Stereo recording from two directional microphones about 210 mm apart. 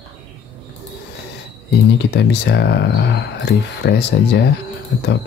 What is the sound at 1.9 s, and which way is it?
Speech, 55° left (ahead or behind).